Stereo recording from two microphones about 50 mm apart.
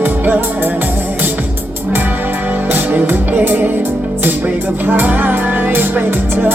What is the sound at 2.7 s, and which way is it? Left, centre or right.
Music, right.